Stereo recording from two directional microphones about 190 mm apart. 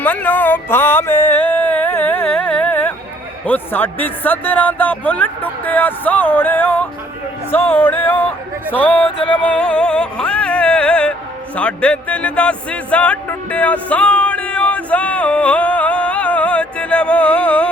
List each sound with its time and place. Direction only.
0.0 s a sound: 10° left (ahead or behind)
3.4 s speech: 10° left (ahead or behind)
9.0 s music: 30° left (ahead or behind)
9.3 s music: 5° left (ahead or behind)
11.5 s speech: 5° left (ahead or behind)